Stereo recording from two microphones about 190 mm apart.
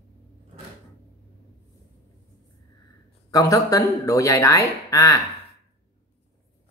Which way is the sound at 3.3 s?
20° left (ahead or behind).